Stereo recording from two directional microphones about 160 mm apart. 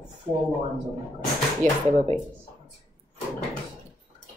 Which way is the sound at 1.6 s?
55° right (ahead or behind).